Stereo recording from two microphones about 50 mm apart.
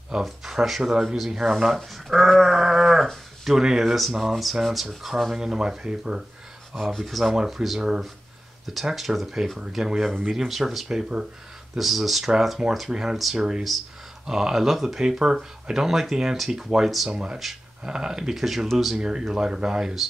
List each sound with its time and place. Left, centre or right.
0.2 s speech: centre
6.7 s speech: centre
13.4 s speech: centre
18.9 s speech: centre